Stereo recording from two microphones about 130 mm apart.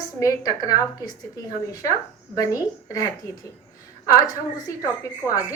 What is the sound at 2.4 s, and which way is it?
Speech, 25° left (ahead or behind).